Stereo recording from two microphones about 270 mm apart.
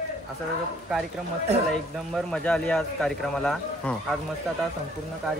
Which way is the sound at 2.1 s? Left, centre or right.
Centre.